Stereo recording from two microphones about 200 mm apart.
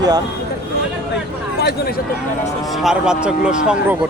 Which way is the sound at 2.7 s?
Centre (ahead or behind).